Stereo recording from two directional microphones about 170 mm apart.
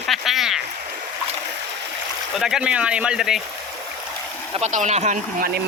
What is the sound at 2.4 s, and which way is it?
A man's voice, 5° right (ahead or behind).